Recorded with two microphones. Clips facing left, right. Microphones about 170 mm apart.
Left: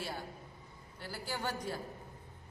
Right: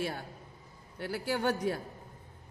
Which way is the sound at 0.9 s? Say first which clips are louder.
Right 8 dB; 60° right (ahead or behind).